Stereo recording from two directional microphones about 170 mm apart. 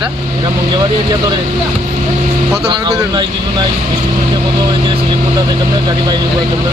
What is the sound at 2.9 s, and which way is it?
Speech, 20° right (ahead or behind).